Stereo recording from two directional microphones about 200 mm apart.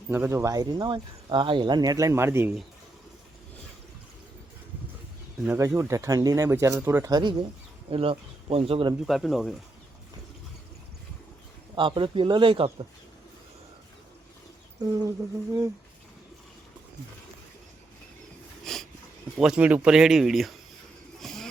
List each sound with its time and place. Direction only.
0.1 s speech: 10° right (ahead or behind)
5.5 s speech: 15° right (ahead or behind)
9.0 s speech: centre (ahead or behind)
11.7 s speech: 25° right (ahead or behind)
14.8 s speech: 20° right (ahead or behind)
18.6 s a sound: centre (ahead or behind)
19.4 s speech: 5° right (ahead or behind)
21.2 s a sound: centre (ahead or behind)